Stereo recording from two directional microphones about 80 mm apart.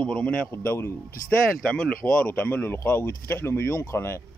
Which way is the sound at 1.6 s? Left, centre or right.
Centre.